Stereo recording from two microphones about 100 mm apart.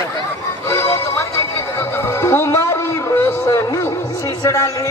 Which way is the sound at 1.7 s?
25° left (ahead or behind).